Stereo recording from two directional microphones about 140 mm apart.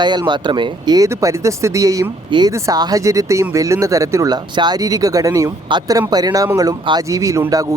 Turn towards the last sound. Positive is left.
turn(degrees=-25)  # may be behind; listen again after turning